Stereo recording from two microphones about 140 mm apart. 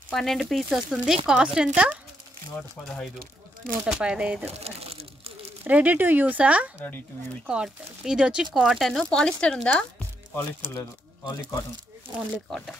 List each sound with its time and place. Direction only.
0.1 s speech: centre (ahead or behind)
3.8 s speech: 5° right (ahead or behind)
4.5 s a sound: 45° right (ahead or behind)
5.6 s speech: 10° right (ahead or behind); by 11.3 s 20° left (ahead or behind)
12.4 s speech: 5° left (ahead or behind)